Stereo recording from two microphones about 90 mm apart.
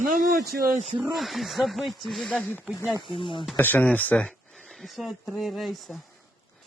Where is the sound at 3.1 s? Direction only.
70° left (ahead or behind).